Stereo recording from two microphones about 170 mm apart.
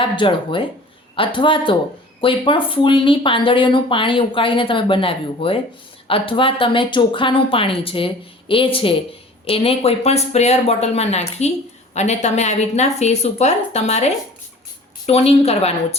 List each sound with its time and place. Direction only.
0.0 s speech: 30° left (ahead or behind)